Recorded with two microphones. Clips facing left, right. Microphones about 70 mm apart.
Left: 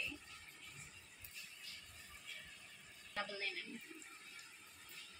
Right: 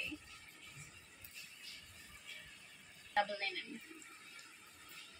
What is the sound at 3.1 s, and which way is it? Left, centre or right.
Speech, right.